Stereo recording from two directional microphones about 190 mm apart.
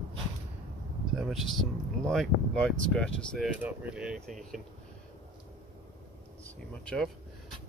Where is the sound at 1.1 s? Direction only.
Centre (ahead or behind).